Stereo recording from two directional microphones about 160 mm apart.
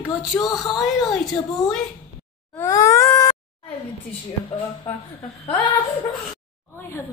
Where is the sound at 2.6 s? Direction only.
20° left (ahead or behind).